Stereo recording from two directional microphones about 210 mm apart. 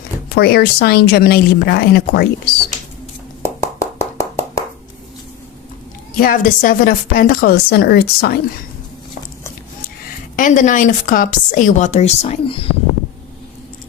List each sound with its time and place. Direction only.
0.3 s a woman's voice: 50° left (ahead or behind)
3.6 s a sound: 15° left (ahead or behind)
6.1 s a woman's voice: 40° left (ahead or behind)
10.3 s a woman's voice: 40° left (ahead or behind)